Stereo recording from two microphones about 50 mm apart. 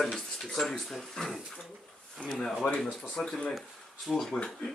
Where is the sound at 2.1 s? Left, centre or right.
Centre.